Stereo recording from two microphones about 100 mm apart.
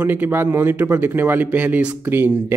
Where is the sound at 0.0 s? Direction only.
20° right (ahead or behind).